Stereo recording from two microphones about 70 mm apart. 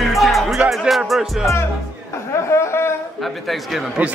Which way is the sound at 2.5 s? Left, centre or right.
Left.